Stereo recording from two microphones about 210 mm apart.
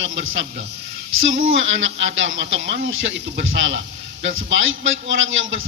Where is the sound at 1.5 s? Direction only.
65° right (ahead or behind).